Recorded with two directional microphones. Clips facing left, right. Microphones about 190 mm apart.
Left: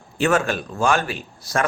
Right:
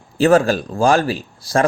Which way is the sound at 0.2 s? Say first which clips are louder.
Right 7 dB; 35° right (ahead or behind).